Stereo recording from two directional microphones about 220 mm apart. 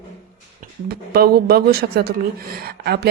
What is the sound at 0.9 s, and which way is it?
Speech, 45° right (ahead or behind).